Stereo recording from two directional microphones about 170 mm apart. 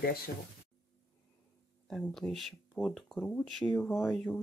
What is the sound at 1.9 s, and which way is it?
Speech, centre (ahead or behind).